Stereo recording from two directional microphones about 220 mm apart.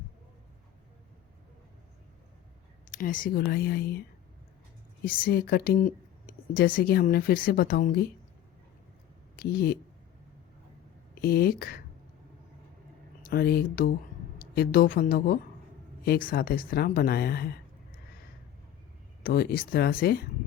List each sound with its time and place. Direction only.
2.9 s a woman's voice: 35° left (ahead or behind)
5.0 s speech: 45° left (ahead or behind)
9.3 s speech: 45° left (ahead or behind)
11.1 s speech: 45° left (ahead or behind)
13.2 s a woman's voice: 45° left (ahead or behind)
19.2 s speech: 40° left (ahead or behind)